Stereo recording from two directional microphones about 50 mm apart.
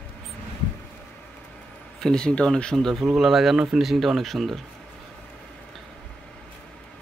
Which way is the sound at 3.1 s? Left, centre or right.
Centre.